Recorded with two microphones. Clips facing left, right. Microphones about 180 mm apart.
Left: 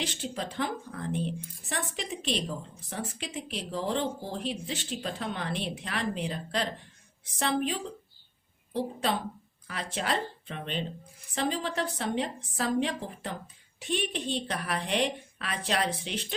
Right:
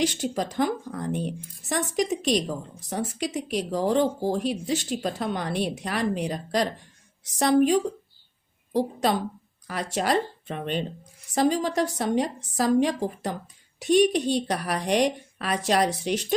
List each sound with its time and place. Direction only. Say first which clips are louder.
0.0 s a woman's voice: right 8 dB; 45° right (ahead or behind)